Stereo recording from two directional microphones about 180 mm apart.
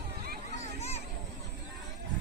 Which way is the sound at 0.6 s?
35° left (ahead or behind).